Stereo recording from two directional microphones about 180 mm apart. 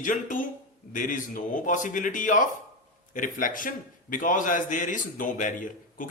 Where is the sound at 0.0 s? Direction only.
45° left (ahead or behind).